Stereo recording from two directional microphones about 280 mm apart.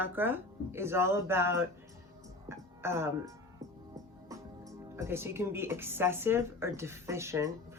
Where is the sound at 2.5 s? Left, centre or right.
Centre.